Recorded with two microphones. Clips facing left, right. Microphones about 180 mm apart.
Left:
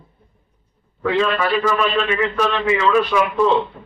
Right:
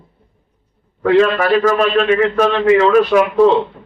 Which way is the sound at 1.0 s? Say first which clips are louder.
Right 6 dB; 60° right (ahead or behind).